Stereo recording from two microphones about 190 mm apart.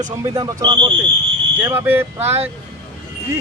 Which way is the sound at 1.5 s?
10° right (ahead or behind).